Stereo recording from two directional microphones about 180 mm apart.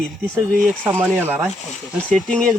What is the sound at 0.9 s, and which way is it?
Speech, 10° right (ahead or behind).